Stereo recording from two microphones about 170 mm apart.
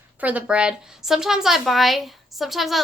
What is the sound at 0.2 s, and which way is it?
A woman's voice, 10° right (ahead or behind).